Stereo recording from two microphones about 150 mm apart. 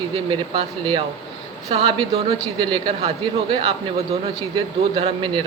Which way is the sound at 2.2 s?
30° right (ahead or behind).